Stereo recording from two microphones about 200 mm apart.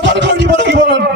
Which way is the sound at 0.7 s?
65° right (ahead or behind).